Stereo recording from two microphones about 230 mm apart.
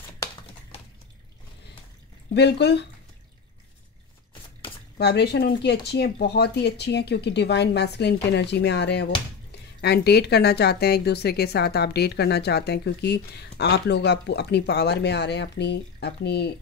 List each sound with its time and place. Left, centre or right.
2.3 s a woman's voice: left
4.9 s a woman's voice: left